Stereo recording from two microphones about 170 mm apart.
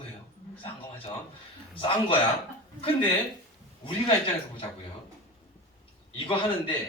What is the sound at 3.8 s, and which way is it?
Speech, 30° left (ahead or behind).